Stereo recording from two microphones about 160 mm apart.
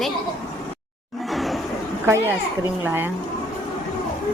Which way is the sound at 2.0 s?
15° right (ahead or behind).